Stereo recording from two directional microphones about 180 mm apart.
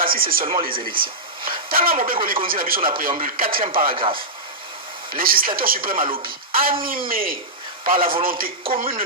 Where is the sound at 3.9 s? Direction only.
30° right (ahead or behind).